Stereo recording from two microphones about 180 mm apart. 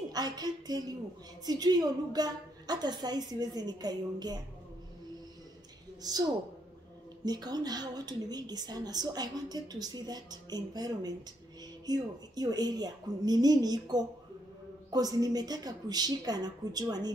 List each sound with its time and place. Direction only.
0.1 s speech: 20° right (ahead or behind)
6.0 s speech: 20° right (ahead or behind)